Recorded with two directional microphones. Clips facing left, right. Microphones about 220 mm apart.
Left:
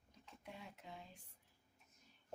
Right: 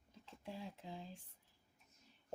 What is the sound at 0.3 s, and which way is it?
Speech, 30° right (ahead or behind).